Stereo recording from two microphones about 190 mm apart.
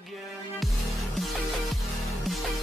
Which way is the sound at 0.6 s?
Centre (ahead or behind).